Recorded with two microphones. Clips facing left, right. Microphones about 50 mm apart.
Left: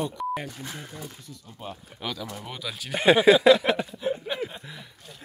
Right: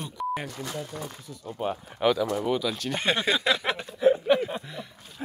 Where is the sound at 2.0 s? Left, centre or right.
Centre.